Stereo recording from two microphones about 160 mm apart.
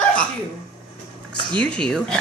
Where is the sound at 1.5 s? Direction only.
5° left (ahead or behind).